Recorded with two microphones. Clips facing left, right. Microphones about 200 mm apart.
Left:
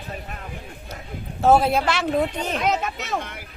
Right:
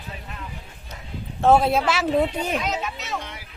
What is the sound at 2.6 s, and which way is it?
Music, 55° left (ahead or behind).